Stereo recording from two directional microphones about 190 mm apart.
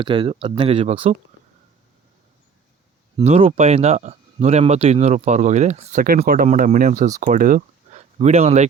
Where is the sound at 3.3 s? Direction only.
35° right (ahead or behind).